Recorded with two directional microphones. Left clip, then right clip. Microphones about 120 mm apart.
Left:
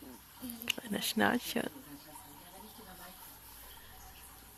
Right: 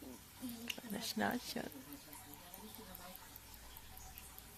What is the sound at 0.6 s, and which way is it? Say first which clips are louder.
Speech: left 9 dB; 85° left.